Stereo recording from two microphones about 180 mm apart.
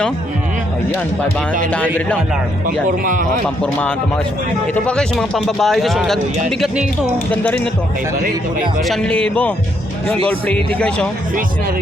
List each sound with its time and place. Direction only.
2.6 s speech: 50° right (ahead or behind)
3.4 s speech: 5° left (ahead or behind)
8.8 s speech: 5° left (ahead or behind)